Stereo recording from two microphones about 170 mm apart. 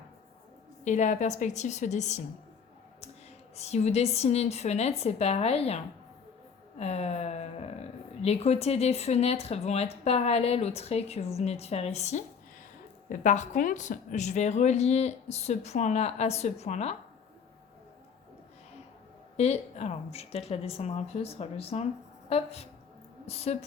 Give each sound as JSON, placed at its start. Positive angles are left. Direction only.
{"t": 0.9, "sound": "a woman's voice", "side_deg": 45}
{"t": 3.5, "sound": "a woman's voice", "side_deg": 40}
{"t": 19.4, "sound": "a woman's voice", "side_deg": 40}